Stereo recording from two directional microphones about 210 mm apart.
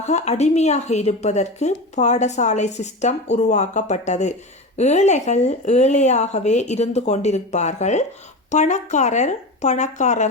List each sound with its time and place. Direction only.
0.0 s a woman's voice: 30° left (ahead or behind)